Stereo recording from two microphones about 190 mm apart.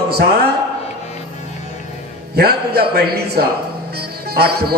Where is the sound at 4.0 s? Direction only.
55° right (ahead or behind).